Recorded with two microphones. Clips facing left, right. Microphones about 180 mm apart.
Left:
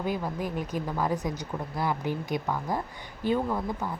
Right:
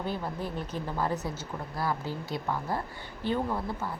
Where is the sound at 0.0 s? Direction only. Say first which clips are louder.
Left 3 dB; 15° left (ahead or behind).